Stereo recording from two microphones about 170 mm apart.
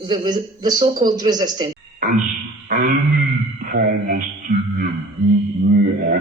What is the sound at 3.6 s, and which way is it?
Speech, 55° right (ahead or behind).